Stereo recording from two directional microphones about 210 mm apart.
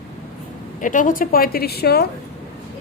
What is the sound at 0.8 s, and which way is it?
A woman's voice, 40° left (ahead or behind).